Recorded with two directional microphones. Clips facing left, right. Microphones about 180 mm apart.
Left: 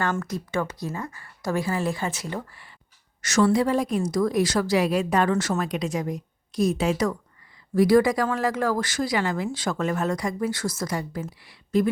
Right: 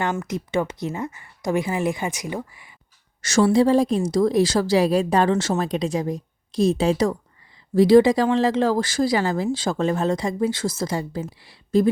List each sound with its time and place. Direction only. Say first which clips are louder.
0.0 s speech: right 2 dB; 20° right (ahead or behind)
3.2 s speech: right 3 dB; 30° right (ahead or behind)